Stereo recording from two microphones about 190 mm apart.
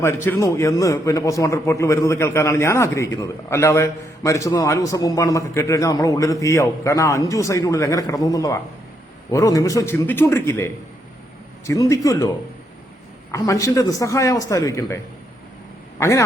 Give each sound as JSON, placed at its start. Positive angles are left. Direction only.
{"t": 0.0, "sound": "a man's voice", "side_deg": 15}
{"t": 13.3, "sound": "a man's voice", "side_deg": 15}
{"t": 16.0, "sound": "a man's voice", "side_deg": 15}